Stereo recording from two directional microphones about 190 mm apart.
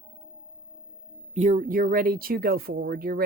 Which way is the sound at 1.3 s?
40° right (ahead or behind).